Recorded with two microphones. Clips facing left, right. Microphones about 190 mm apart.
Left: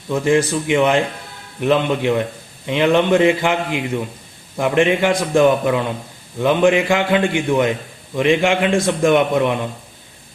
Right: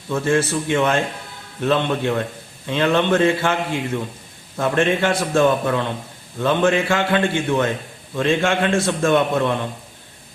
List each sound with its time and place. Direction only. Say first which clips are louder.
0.1 s a man's voice: left 3 dB; 15° left (ahead or behind)